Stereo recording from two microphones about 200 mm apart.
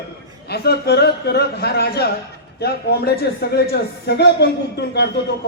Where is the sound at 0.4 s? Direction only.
55° left (ahead or behind).